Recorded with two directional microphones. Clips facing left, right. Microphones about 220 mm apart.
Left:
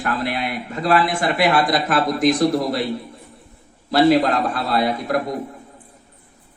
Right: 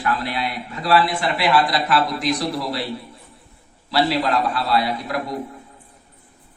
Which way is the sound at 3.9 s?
45° left (ahead or behind).